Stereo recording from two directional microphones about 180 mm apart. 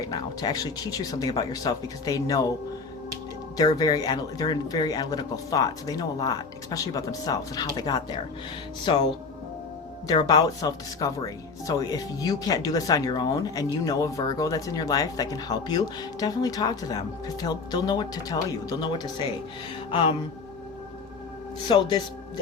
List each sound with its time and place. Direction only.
0.0 s speech: 20° left (ahead or behind)
3.6 s speech: 20° left (ahead or behind)
10.1 s speech: 25° left (ahead or behind)
21.7 s speech: 25° left (ahead or behind)